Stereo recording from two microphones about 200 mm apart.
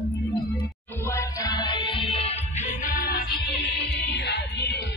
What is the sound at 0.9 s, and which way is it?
Music, 15° left (ahead or behind).